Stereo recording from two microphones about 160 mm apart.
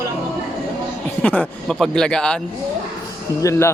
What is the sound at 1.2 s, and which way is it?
Speech, 10° left (ahead or behind).